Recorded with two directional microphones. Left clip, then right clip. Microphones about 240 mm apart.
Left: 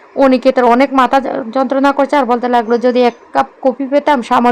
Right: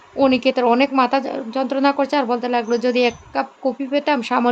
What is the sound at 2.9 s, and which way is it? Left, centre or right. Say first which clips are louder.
Speech: left 5 dB; centre.